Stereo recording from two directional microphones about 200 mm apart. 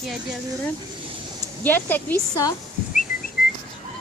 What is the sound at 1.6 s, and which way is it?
Speech, 10° left (ahead or behind).